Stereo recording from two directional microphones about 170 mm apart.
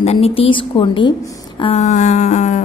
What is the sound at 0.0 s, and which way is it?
A woman's voice, 35° left (ahead or behind).